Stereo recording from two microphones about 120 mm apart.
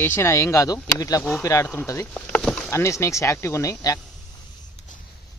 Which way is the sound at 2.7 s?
25° left (ahead or behind).